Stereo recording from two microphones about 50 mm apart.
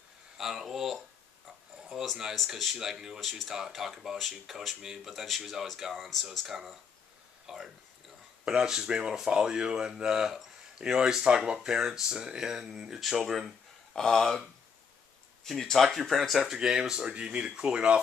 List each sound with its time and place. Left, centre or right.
0.4 s speech: centre
1.9 s a sound: centre
2.3 s speech: centre
7.4 s a sound: centre
8.5 s speech: centre
13.9 s speech: centre
15.5 s speech: centre